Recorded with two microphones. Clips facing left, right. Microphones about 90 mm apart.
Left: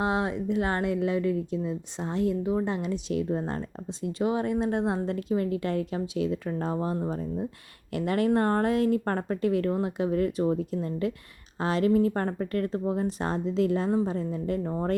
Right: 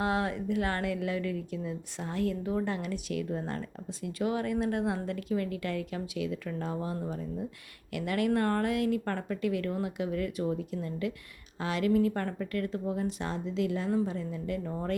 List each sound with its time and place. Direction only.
0.0 s speech: 20° left (ahead or behind)